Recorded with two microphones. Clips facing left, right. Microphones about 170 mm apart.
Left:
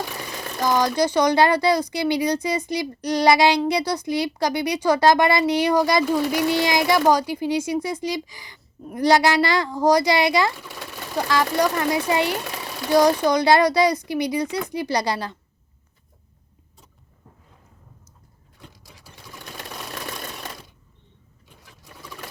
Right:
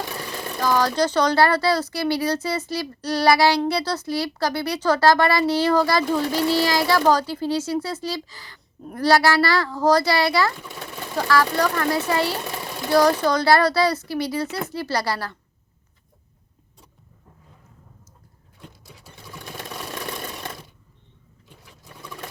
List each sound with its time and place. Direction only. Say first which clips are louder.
0.6 s speech: left 1 dB; 15° left (ahead or behind)